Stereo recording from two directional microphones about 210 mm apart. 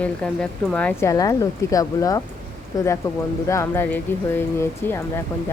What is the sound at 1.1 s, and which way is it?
Speech, 15° left (ahead or behind).